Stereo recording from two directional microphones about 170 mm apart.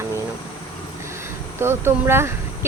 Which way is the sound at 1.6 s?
15° right (ahead or behind).